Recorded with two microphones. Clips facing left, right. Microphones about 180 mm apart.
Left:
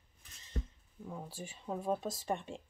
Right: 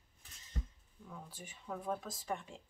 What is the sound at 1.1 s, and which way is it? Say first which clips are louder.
Speech: left 6 dB; 30° left (ahead or behind).